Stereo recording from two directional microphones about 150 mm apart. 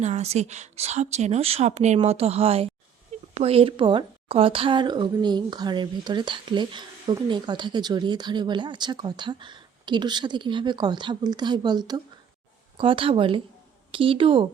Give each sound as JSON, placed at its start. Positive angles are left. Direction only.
{"t": 0.0, "sound": "a woman's voice", "side_deg": -45}